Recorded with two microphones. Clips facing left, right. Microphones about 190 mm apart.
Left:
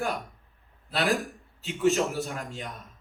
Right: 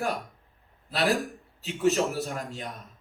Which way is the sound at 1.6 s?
40° right (ahead or behind).